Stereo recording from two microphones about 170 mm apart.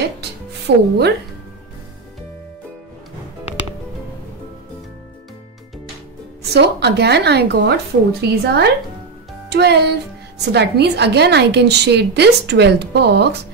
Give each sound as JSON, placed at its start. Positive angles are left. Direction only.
{"t": 0.0, "sound": "music", "side_deg": -75}
{"t": 6.5, "sound": "a woman's voice", "side_deg": -80}